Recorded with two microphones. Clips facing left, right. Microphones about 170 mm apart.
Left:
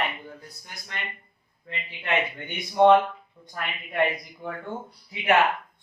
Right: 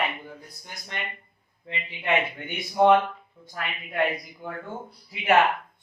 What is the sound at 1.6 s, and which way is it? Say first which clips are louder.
Speech: right 4 dB; 15° right (ahead or behind).